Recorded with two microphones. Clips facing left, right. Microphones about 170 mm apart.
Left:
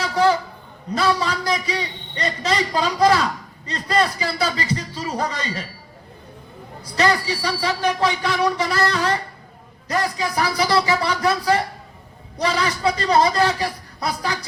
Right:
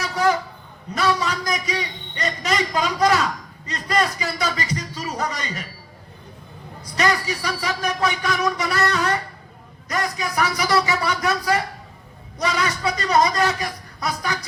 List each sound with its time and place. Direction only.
0.0 s a sound: 30° left (ahead or behind)
0.9 s a man's voice: 30° left (ahead or behind)
6.9 s a man's voice: 30° left (ahead or behind)